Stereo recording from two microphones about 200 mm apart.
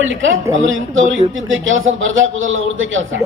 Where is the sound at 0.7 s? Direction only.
75° right (ahead or behind).